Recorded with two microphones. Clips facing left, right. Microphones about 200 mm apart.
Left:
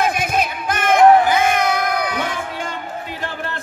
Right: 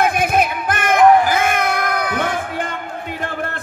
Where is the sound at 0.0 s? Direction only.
55° right (ahead or behind).